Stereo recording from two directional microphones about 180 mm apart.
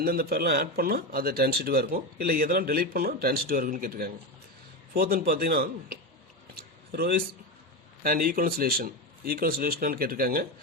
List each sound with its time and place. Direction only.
0.0 s speech: 55° right (ahead or behind)
6.5 s a sound: 60° right (ahead or behind)
8.0 s speech: 55° right (ahead or behind)